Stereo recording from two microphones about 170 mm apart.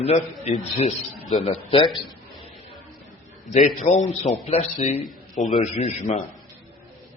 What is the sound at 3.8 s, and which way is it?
A man's voice, 40° left (ahead or behind).